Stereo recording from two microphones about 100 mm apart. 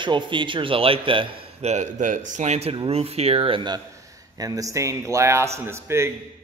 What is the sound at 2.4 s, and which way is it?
Speech, 90° right.